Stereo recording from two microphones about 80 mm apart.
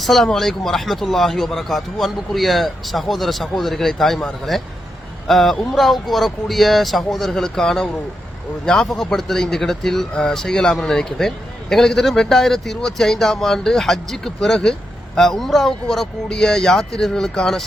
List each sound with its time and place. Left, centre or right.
0.0 s speech: centre